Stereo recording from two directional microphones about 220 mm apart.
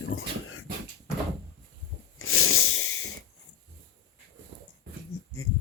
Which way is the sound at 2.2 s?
70° left (ahead or behind).